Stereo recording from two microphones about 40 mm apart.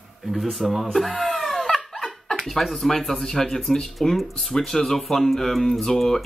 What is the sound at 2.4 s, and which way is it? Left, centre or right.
Speech, centre.